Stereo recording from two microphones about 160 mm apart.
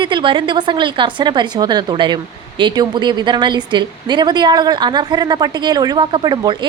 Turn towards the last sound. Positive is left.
turn(degrees=-25)  # may be behind; listen again after turning